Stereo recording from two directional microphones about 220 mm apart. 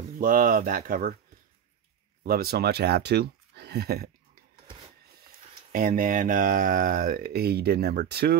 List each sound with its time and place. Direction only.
0.2 s speech: 40° right (ahead or behind)
2.2 s speech: 45° right (ahead or behind)
5.7 s speech: 40° right (ahead or behind)